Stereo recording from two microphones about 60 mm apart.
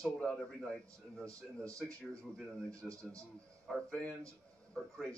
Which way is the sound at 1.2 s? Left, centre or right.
Right.